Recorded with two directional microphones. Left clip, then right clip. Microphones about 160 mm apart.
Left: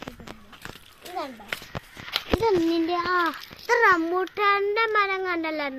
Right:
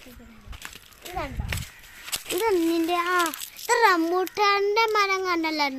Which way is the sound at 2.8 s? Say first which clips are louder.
Right 1 dB; 20° right (ahead or behind).